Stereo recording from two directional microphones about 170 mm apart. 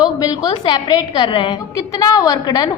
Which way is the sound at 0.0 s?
25° left (ahead or behind).